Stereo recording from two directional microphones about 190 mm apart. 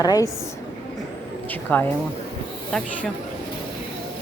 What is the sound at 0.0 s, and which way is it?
Speech, 20° left (ahead or behind).